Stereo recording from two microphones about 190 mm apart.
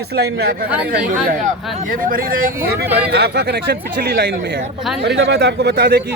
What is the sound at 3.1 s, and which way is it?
A man's voice, 60° right (ahead or behind).